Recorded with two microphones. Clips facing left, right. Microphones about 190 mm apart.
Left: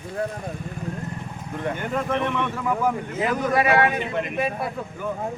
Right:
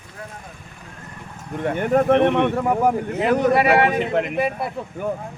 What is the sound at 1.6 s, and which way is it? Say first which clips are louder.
Speech: right 8 dB; 55° right (ahead or behind).